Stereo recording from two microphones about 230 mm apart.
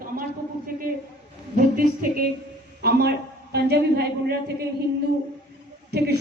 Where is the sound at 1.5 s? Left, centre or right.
Right.